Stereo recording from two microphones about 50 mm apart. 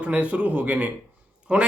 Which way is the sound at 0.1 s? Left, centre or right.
Right.